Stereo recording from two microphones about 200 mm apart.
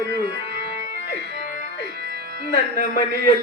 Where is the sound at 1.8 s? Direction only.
55° right (ahead or behind).